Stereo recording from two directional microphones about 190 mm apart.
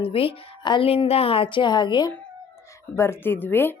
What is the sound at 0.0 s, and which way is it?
A woman's voice, 30° left (ahead or behind).